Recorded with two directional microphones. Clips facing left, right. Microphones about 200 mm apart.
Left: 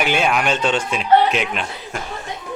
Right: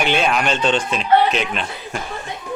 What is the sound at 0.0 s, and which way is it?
Speech, 5° left (ahead or behind).